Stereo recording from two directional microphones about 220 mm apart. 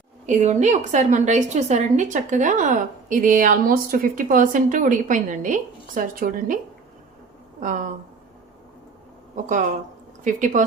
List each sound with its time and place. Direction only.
0.3 s a woman's voice: 30° right (ahead or behind)
7.6 s a woman's voice: 35° right (ahead or behind)
9.3 s a woman's voice: 35° right (ahead or behind)